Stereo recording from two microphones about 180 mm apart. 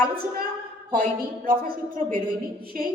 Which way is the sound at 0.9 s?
50° right (ahead or behind).